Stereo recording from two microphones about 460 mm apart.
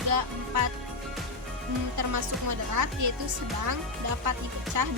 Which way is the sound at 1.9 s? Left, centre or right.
Right.